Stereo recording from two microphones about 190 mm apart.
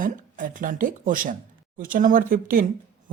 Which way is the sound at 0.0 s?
45° right (ahead or behind).